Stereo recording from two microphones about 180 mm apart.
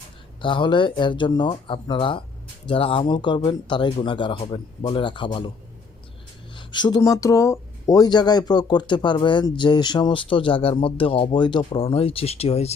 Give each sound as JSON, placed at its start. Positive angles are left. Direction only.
{"t": 0.4, "sound": "speech", "side_deg": 25}
{"t": 6.6, "sound": "speech", "side_deg": 25}